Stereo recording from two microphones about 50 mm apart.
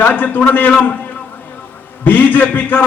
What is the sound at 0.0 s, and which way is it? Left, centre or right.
Speech, left.